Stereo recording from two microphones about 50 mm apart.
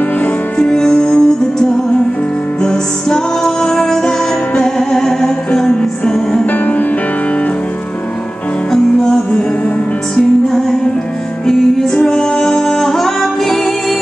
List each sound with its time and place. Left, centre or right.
0.6 s music: centre
6.4 s music: left
10.1 s music: centre